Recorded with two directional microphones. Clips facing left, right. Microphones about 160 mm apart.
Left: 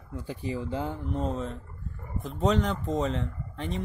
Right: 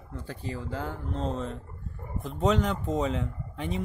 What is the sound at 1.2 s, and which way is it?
Speech, centre (ahead or behind).